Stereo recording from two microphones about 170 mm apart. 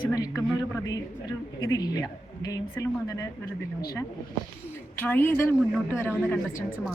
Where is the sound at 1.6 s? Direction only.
20° left (ahead or behind).